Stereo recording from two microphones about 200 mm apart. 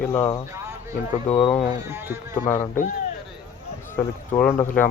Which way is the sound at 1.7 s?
15° right (ahead or behind).